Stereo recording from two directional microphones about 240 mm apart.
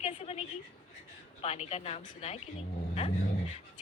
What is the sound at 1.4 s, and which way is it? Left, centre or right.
Speech, left.